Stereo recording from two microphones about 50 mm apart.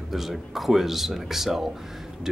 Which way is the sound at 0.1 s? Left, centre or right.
Centre.